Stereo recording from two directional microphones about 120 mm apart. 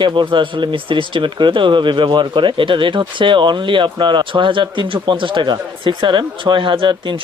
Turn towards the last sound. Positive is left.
turn(degrees=-45)  # may be behind; listen again after turning